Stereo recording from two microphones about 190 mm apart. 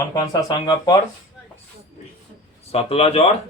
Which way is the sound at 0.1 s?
20° left (ahead or behind).